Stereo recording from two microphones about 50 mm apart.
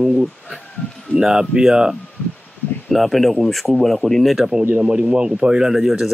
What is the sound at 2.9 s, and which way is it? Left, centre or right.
Speech, centre.